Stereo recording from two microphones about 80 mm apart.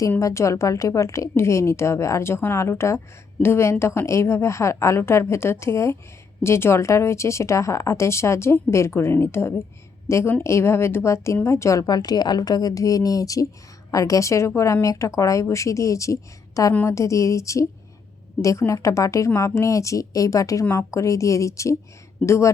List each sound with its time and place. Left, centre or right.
0.2 s a woman's voice: left